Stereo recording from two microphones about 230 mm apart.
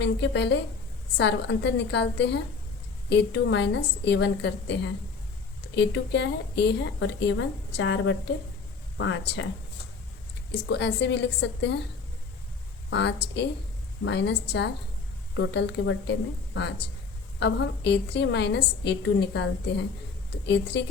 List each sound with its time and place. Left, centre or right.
0.0 s a woman's voice: left
10.7 s a woman's voice: left
12.9 s a woman's voice: left
17.4 s a woman's voice: left